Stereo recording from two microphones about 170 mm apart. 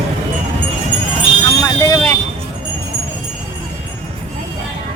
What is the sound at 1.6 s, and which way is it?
Vehicle, 20° left (ahead or behind).